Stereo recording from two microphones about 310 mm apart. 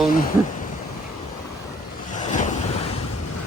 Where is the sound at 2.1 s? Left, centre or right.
Left.